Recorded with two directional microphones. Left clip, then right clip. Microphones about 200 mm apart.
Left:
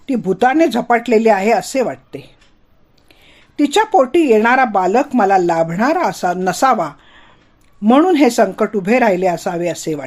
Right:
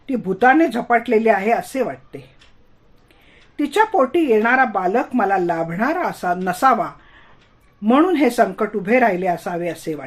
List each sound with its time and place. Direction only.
0.0 s speech: 40° left (ahead or behind)
3.6 s speech: 40° left (ahead or behind)